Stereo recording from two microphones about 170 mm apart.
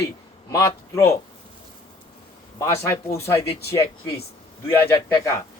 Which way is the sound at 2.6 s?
15° left (ahead or behind).